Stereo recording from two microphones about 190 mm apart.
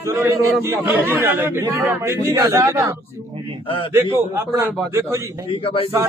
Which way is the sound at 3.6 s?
25° left (ahead or behind).